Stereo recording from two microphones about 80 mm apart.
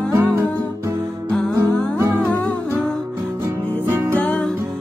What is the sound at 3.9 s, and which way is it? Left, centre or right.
Music, right.